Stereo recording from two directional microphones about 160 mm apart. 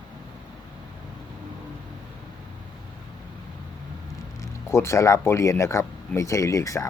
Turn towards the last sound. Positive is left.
turn(degrees=20)  # may be behind; listen again after turning